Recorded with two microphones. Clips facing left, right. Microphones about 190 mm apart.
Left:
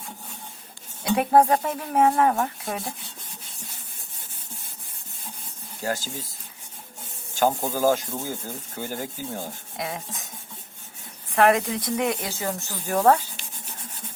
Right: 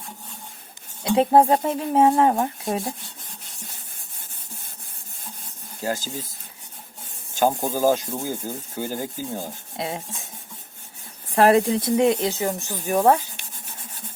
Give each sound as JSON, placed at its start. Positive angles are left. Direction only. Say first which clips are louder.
{"t": 1.0, "sound": "speech", "louder": "right 2 dB", "side_deg": -25}
{"t": 7.3, "sound": "speech", "louder": "right 2 dB", "side_deg": -15}
{"t": 9.7, "sound": "rub", "louder": "right 3 dB", "side_deg": -25}
{"t": 11.3, "sound": "speech", "louder": "right 3 dB", "side_deg": -30}